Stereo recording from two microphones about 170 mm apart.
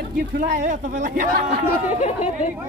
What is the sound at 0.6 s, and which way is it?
Speech, 45° right (ahead or behind).